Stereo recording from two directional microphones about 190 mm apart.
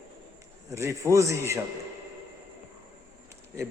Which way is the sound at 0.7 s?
15° right (ahead or behind).